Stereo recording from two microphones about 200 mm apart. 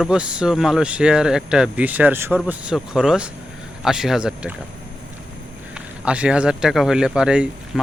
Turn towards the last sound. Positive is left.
turn(degrees=-5)  # may be behind; listen again after turning